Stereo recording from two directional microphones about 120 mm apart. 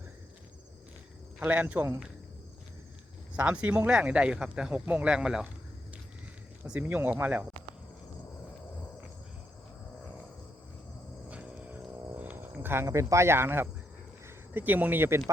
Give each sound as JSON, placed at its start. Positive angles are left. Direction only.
{"t": 1.4, "sound": "speech", "side_deg": -15}
{"t": 3.3, "sound": "speech", "side_deg": -10}
{"t": 6.7, "sound": "speech", "side_deg": -15}
{"t": 11.3, "sound": "a sound", "side_deg": -10}
{"t": 12.1, "sound": "speech", "side_deg": -15}